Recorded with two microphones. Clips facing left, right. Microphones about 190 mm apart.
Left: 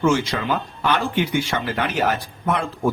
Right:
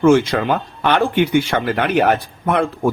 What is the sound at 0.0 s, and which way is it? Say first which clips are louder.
Speech: right 7 dB; 55° right (ahead or behind).